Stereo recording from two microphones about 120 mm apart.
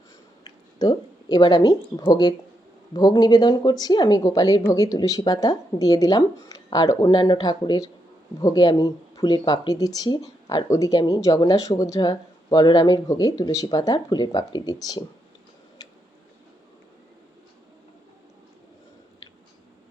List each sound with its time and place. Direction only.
0.4 s speech: 35° left (ahead or behind)
15.8 s tick-tock: 35° left (ahead or behind)